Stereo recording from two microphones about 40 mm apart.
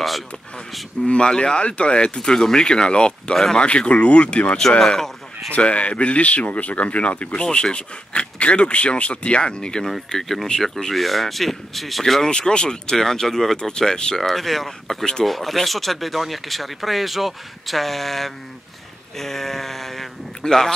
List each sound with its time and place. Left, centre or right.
1.0 s speech: left
4.6 s speech: centre
5.5 s speech: left
7.4 s speech: left
9.8 s speech: centre
12.3 s speech: left